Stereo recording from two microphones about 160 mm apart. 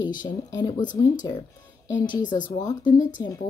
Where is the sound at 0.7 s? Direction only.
55° left (ahead or behind).